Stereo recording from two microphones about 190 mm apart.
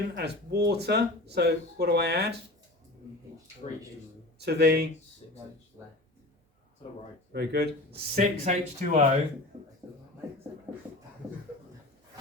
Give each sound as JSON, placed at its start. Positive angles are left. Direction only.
{"t": 0.2, "sound": "speech", "side_deg": -60}
{"t": 4.4, "sound": "speech", "side_deg": -60}
{"t": 5.8, "sound": "speech", "side_deg": -15}
{"t": 7.3, "sound": "speech", "side_deg": -55}
{"t": 8.1, "sound": "speech", "side_deg": -45}
{"t": 9.8, "sound": "a sound", "side_deg": -20}